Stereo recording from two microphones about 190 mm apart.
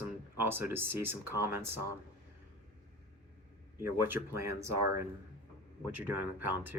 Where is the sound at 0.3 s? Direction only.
10° right (ahead or behind).